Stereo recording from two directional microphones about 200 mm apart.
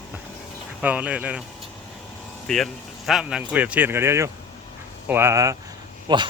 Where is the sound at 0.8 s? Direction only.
5° right (ahead or behind).